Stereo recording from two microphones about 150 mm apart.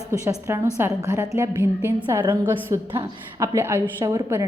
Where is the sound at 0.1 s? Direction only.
20° right (ahead or behind).